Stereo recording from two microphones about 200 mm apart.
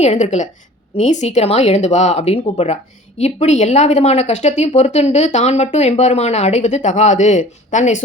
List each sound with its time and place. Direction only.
0.0 s a woman's voice: 35° left (ahead or behind)